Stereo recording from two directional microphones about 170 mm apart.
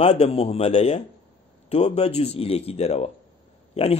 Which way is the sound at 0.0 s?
40° left (ahead or behind).